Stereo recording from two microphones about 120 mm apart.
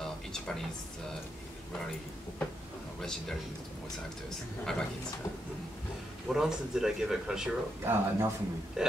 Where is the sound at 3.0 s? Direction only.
5° left (ahead or behind).